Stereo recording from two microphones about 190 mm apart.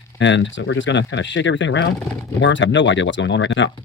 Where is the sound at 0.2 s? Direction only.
70° left (ahead or behind).